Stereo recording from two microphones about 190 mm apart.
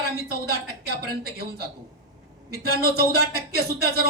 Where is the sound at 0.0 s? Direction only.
55° right (ahead or behind).